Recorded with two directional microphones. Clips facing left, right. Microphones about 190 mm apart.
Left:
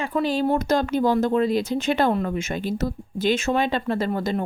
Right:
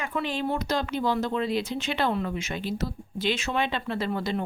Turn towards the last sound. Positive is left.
turn(degrees=45)  # may be behind; listen again after turning